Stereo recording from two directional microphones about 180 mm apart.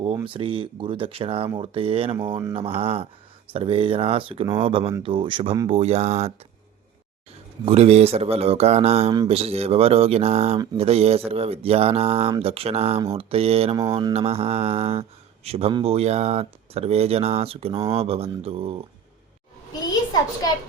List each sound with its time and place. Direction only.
0.3 s speech: 30° right (ahead or behind)
7.6 s speech: 35° right (ahead or behind)
19.9 s a sound: 20° left (ahead or behind)